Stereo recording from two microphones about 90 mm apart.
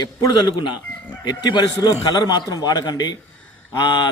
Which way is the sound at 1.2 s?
55° left (ahead or behind).